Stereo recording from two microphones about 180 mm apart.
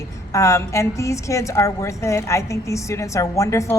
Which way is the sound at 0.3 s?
15° left (ahead or behind).